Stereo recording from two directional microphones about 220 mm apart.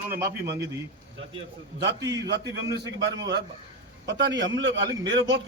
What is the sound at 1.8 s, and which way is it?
Speech, 50° right (ahead or behind).